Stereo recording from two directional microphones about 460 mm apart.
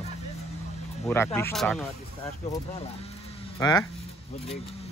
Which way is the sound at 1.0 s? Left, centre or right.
Centre.